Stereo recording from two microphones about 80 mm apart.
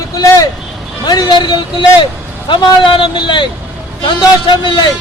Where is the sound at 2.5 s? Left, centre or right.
Left.